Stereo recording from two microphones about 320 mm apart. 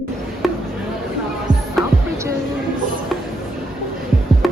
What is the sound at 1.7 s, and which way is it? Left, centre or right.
Music, centre.